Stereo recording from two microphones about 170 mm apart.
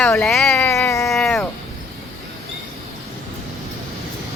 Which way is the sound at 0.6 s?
15° left (ahead or behind).